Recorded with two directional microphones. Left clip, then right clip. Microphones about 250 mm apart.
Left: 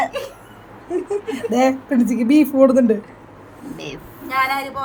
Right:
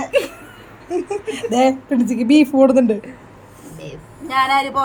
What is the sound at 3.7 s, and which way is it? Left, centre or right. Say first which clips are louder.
Speech: left 3 dB; centre.